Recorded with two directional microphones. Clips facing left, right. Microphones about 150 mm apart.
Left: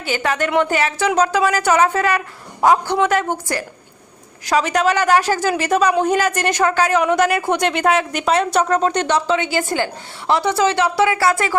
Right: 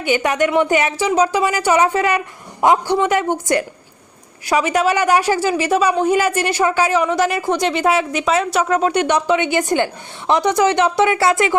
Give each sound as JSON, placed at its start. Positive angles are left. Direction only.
{"t": 0.2, "sound": "a woman's voice", "side_deg": -15}
{"t": 4.4, "sound": "a woman's voice", "side_deg": -10}